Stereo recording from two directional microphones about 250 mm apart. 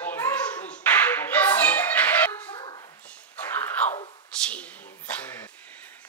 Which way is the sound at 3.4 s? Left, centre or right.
Centre.